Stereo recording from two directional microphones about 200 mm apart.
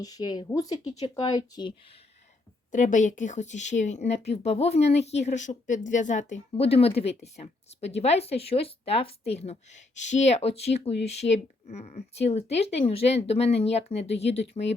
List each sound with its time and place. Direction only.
0.0 s speech: 20° left (ahead or behind)
2.7 s speech: 40° left (ahead or behind)